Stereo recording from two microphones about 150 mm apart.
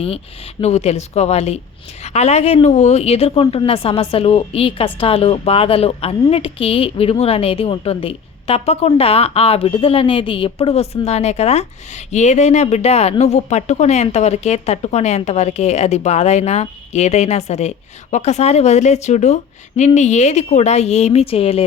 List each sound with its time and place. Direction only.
0.6 s a woman's voice: 45° left (ahead or behind)